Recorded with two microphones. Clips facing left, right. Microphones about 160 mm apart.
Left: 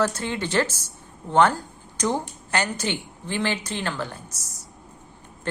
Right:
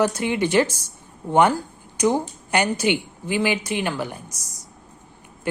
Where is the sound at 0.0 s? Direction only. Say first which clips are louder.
Right 4 dB; 15° right (ahead or behind).